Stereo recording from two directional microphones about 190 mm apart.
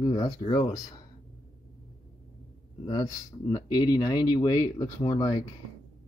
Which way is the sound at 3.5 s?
20° left (ahead or behind).